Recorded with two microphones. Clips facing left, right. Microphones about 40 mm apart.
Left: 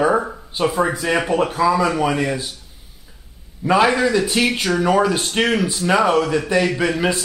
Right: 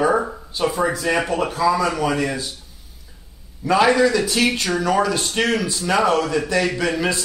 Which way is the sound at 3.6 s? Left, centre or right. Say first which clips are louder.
Even; centre.